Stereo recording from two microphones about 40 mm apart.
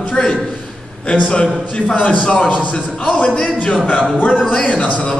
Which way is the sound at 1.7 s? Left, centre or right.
Left.